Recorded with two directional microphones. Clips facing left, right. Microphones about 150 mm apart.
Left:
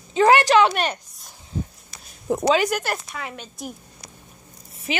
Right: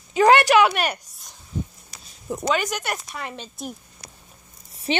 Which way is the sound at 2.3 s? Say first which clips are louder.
Left 6 dB; 75° left (ahead or behind).